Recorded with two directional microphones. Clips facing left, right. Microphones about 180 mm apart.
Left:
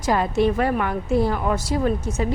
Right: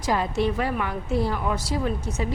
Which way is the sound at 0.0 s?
50° left (ahead or behind).